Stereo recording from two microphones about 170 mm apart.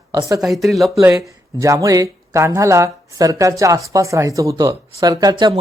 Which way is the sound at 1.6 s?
20° right (ahead or behind).